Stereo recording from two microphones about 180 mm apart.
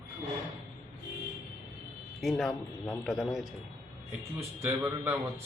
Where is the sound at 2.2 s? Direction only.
Centre (ahead or behind).